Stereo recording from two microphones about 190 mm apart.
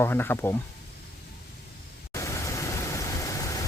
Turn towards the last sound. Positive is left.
turn(degrees=15)  # may be behind; listen again after turning